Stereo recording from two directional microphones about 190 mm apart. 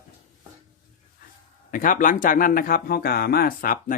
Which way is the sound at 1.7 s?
45° left (ahead or behind).